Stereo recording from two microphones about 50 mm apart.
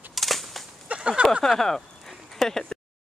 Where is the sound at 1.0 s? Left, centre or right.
Right.